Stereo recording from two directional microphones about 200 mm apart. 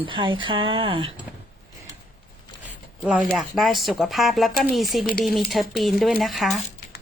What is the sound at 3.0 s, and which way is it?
Speech, 5° right (ahead or behind).